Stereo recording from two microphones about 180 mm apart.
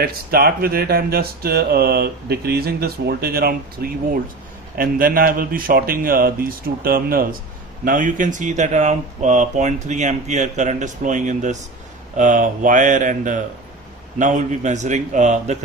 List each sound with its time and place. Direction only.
0.0 s a man's voice: 55° right (ahead or behind); by 15.6 s 40° right (ahead or behind)